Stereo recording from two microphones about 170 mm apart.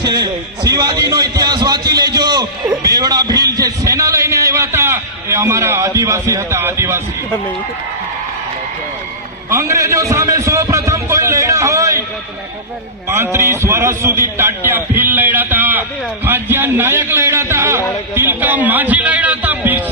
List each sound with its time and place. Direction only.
0.0 s a man's voice: 25° right (ahead or behind)
9.5 s a man's voice: 15° right (ahead or behind)
13.1 s a man's voice: 15° right (ahead or behind)